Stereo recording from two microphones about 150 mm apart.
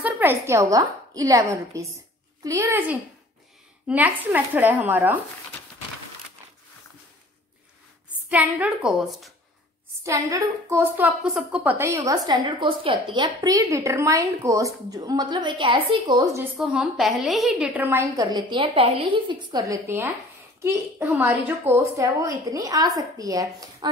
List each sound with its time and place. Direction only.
0.0 s a woman's voice: 15° right (ahead or behind)
3.8 s a woman's voice: 10° right (ahead or behind)
8.3 s a woman's voice: 10° right (ahead or behind)
10.0 s a woman's voice: 20° right (ahead or behind)
16.5 s a woman's voice: 5° right (ahead or behind); by 23.9 s 25° right (ahead or behind)